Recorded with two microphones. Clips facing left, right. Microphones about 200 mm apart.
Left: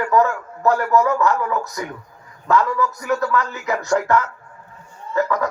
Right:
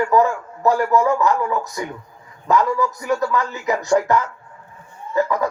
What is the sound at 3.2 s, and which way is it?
A man's voice, 20° right (ahead or behind).